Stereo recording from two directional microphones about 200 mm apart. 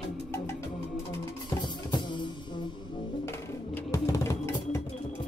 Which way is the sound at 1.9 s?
25° left (ahead or behind).